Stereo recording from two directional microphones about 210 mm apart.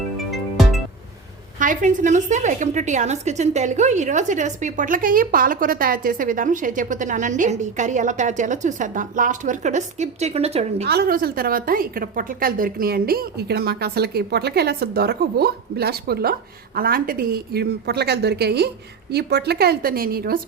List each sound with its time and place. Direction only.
0.3 s music: centre (ahead or behind)
1.5 s a woman's voice: 40° right (ahead or behind)
10.8 s a woman's voice: 50° right (ahead or behind)